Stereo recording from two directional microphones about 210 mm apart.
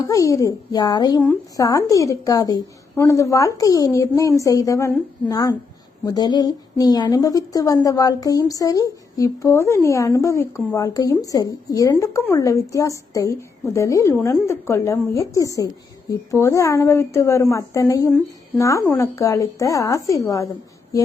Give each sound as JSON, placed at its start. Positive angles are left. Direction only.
{"t": 0.0, "sound": "a woman's voice", "side_deg": 15}